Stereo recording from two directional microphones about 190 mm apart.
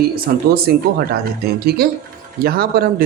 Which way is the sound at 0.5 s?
55° right (ahead or behind).